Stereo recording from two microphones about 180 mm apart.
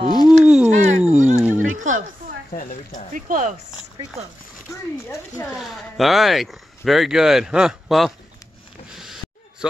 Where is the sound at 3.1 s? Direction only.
45° right (ahead or behind).